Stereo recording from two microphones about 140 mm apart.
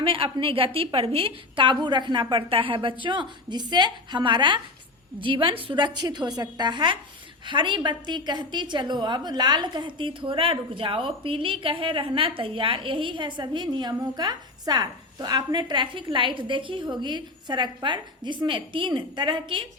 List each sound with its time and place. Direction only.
0.0 s a woman's voice: 40° right (ahead or behind)